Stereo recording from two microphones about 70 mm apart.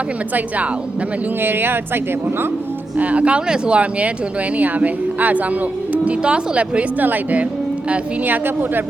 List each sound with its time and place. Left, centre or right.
0.3 s speech: right
3.0 s speech: centre